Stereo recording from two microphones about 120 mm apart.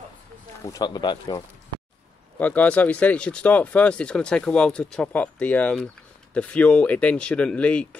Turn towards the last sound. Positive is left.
turn(degrees=10)  # may be behind; listen again after turning